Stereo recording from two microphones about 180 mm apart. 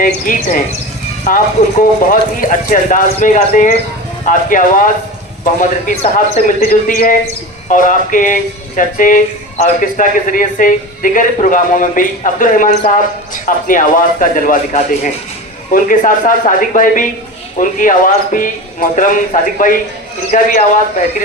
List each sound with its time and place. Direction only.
0.3 s speech: 50° left (ahead or behind)